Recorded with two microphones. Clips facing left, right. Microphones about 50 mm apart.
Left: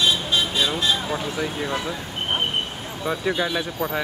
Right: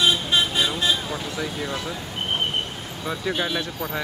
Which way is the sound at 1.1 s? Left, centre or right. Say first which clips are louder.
Left 3 dB; centre.